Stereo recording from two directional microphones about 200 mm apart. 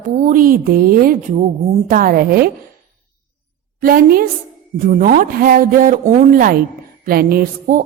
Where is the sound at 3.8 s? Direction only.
45° right (ahead or behind).